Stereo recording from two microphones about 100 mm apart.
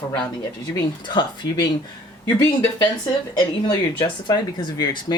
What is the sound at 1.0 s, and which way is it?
Speech, 50° left (ahead or behind).